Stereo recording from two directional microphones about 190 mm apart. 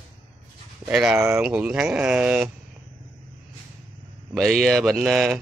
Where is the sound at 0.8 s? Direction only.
Centre (ahead or behind).